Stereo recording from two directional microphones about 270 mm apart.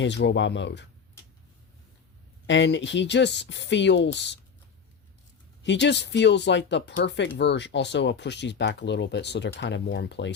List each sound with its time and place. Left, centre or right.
0.0 s speech: left
2.5 s speech: left
5.6 s speech: left